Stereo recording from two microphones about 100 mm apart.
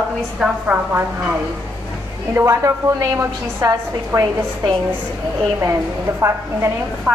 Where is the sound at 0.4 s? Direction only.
5° right (ahead or behind).